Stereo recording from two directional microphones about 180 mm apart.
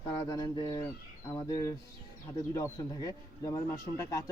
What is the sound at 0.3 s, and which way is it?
Speech, 20° left (ahead or behind).